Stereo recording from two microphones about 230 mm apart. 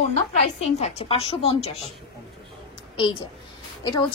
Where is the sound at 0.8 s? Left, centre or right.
Left.